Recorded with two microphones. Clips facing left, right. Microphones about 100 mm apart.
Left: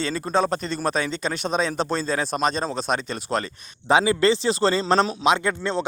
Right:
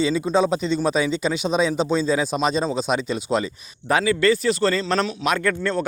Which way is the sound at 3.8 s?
25° left (ahead or behind).